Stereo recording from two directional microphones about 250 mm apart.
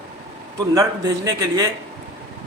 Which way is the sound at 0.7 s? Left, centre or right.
Centre.